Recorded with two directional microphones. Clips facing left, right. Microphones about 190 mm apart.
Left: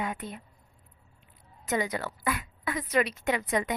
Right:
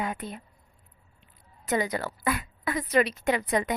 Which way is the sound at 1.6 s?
35° right (ahead or behind).